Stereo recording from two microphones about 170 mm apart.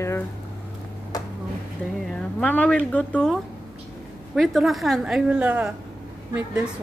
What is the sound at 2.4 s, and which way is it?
Speech, 10° left (ahead or behind).